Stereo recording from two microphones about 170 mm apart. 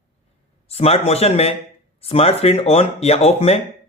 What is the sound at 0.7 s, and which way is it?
Speech, 35° left (ahead or behind).